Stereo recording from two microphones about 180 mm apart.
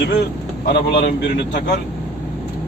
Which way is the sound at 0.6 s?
65° left (ahead or behind).